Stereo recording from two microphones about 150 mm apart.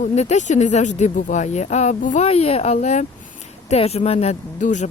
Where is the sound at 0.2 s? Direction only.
50° left (ahead or behind).